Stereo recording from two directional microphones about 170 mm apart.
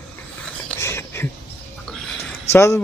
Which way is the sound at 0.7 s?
15° left (ahead or behind).